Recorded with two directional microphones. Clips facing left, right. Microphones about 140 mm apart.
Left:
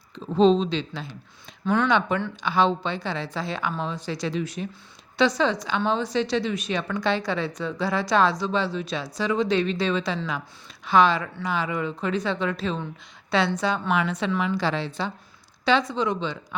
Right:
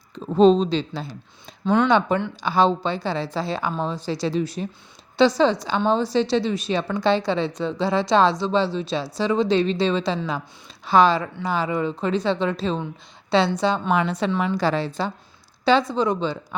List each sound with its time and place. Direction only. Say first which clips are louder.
0.3 s speech: right 3 dB; 45° right (ahead or behind)
1.6 s speech: right 4 dB; 20° right (ahead or behind)
1.9 s a woman's voice: right 4 dB; 35° right (ahead or behind)